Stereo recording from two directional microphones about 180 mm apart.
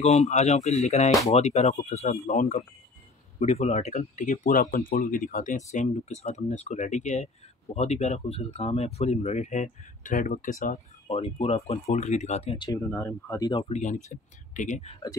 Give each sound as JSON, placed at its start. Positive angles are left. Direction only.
{"t": 0.0, "sound": "speech", "side_deg": 40}
{"t": 11.1, "sound": "speech", "side_deg": 35}
{"t": 12.5, "sound": "speech", "side_deg": 15}
{"t": 13.5, "sound": "speech", "side_deg": 25}
{"t": 13.7, "sound": "speech", "side_deg": 40}